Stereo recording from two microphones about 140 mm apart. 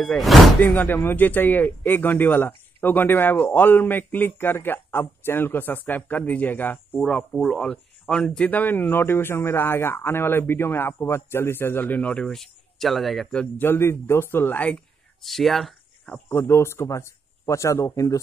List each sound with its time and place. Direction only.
0.0 s speech: centre (ahead or behind)
16.3 s speech: 15° left (ahead or behind)